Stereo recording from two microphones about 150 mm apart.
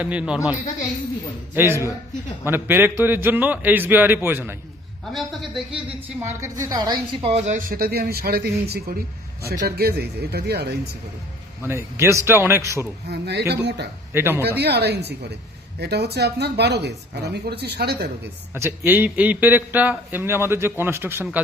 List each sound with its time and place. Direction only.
0.0 s a man's voice: 5° right (ahead or behind)
1.5 s a man's voice: 15° right (ahead or behind)
5.1 s speech: centre (ahead or behind)
6.1 s a woman's voice: 20° right (ahead or behind)
7.3 s speech: 50° right (ahead or behind); by 10.8 s 90° right
11.6 s a man's voice: 15° right (ahead or behind)
13.1 s speech: 90° right
14.1 s a man's voice: 15° right (ahead or behind)
14.6 s speech: 90° right
18.5 s a man's voice: 15° right (ahead or behind)